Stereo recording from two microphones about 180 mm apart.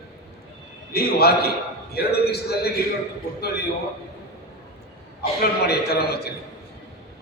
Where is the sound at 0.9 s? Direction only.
60° left (ahead or behind).